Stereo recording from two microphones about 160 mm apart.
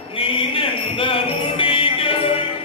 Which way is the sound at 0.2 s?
35° left (ahead or behind).